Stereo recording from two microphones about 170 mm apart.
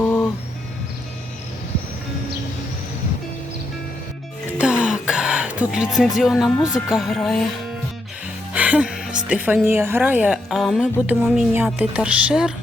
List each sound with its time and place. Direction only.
0.0 s music: 10° left (ahead or behind)
4.5 s music: 5° right (ahead or behind)
6.6 s speech: 20° left (ahead or behind)
6.9 s speech: centre (ahead or behind)
8.5 s a woman's voice: 10° right (ahead or behind)
11.5 s a woman's voice: 10° right (ahead or behind)